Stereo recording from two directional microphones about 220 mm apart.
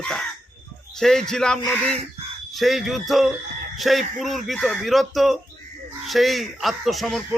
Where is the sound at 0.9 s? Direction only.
Centre (ahead or behind).